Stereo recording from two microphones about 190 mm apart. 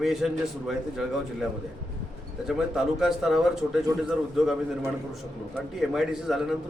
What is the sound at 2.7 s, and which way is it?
Speech, centre (ahead or behind).